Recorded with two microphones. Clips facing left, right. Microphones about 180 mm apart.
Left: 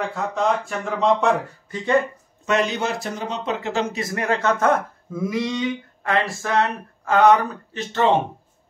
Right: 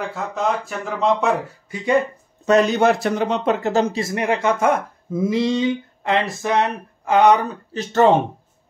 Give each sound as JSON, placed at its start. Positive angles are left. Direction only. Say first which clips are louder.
{"t": 0.0, "sound": "speech", "louder": "even", "side_deg": 0}
{"t": 2.4, "sound": "a man's voice", "louder": "right 6 dB", "side_deg": -40}
{"t": 2.8, "sound": "speech", "louder": "right 9 dB", "side_deg": -65}
{"t": 3.9, "sound": "speech", "louder": "right 2 dB", "side_deg": -25}
{"t": 5.2, "sound": "speech", "louder": "right 5 dB", "side_deg": -30}
{"t": 7.7, "sound": "speech", "louder": "right 5 dB", "side_deg": -45}